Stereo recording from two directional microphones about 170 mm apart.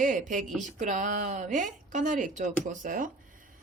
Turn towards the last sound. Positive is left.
turn(degrees=-50)  # may be behind; listen again after turning